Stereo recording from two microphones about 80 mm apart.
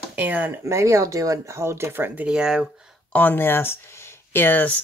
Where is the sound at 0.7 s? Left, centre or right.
Right.